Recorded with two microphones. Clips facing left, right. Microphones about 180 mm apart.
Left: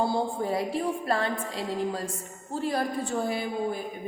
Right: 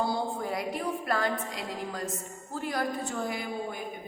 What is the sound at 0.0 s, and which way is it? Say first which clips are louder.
A woman's voice: left 3 dB; 30° left (ahead or behind).